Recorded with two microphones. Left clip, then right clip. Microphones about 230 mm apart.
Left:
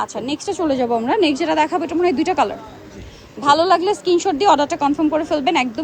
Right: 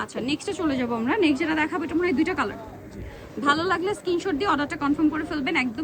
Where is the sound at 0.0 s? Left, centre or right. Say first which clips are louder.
Left 5 dB; centre.